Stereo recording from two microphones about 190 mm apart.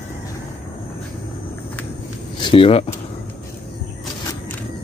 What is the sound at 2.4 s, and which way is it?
Speech, 30° left (ahead or behind).